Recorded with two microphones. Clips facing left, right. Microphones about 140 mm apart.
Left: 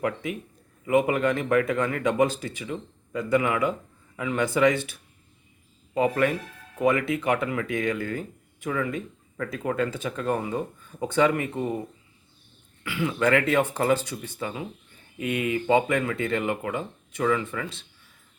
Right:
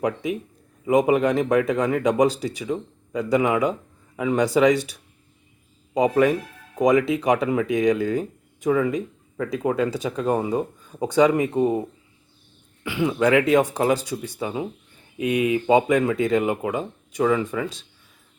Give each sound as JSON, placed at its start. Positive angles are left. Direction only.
{"t": 0.0, "sound": "a man's voice", "side_deg": -15}
{"t": 5.9, "sound": "a man's voice", "side_deg": -15}
{"t": 12.8, "sound": "speech", "side_deg": -20}